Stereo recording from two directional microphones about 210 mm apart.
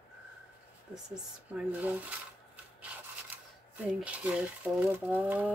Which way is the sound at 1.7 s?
5° right (ahead or behind).